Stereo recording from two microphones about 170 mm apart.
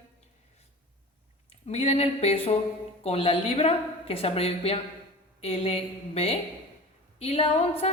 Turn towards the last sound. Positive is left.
turn(degrees=35)  # may be behind; listen again after turning